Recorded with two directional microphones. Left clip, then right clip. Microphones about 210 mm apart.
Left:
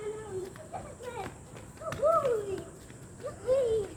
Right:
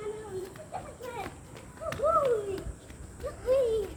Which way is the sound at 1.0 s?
10° right (ahead or behind).